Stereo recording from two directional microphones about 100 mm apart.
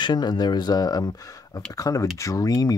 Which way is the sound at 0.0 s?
45° left (ahead or behind).